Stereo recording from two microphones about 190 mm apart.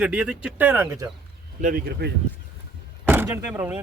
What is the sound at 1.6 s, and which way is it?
Speech, 55° right (ahead or behind).